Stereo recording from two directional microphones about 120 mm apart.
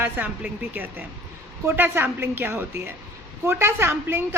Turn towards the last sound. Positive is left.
turn(degrees=-20)  # may be behind; listen again after turning